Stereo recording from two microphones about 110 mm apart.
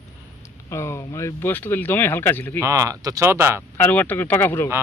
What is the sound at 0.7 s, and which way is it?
Speech, 25° left (ahead or behind).